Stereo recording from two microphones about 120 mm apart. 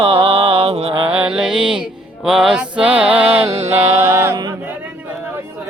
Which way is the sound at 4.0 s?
20° right (ahead or behind).